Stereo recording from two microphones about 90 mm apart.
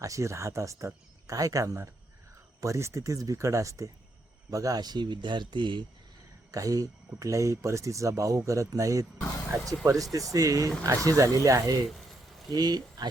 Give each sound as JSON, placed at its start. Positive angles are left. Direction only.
{"t": 0.0, "sound": "speech", "side_deg": -35}
{"t": 6.5, "sound": "speech", "side_deg": -40}